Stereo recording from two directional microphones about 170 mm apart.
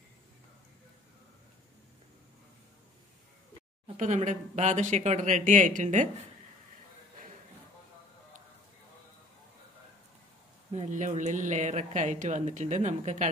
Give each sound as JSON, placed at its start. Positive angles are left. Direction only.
{"t": 3.8, "sound": "a woman's voice", "side_deg": -45}
{"t": 10.7, "sound": "a woman's voice", "side_deg": -45}